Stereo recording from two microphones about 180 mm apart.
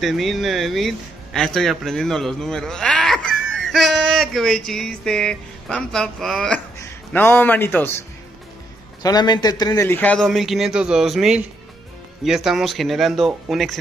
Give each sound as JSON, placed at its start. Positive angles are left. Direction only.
{"t": 0.0, "sound": "a man's voice", "side_deg": 0}
{"t": 9.0, "sound": "a man's voice", "side_deg": 20}